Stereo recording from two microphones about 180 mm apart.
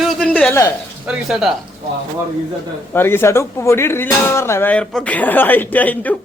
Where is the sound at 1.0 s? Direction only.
5° right (ahead or behind).